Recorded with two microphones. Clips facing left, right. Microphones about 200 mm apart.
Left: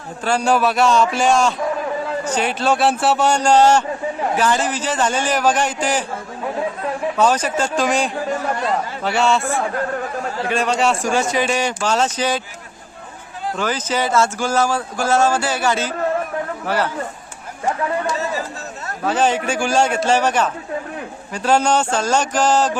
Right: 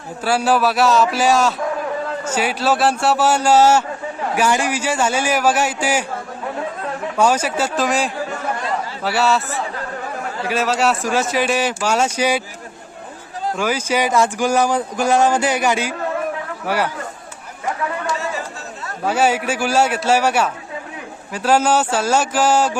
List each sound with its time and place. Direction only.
0.3 s a man's voice: 5° right (ahead or behind)
7.2 s a man's voice: 10° right (ahead or behind)
9.5 s speech: 50° left (ahead or behind)
10.5 s a man's voice: 5° right (ahead or behind)
13.6 s speech: 10° right (ahead or behind)
19.0 s speech: 10° right (ahead or behind)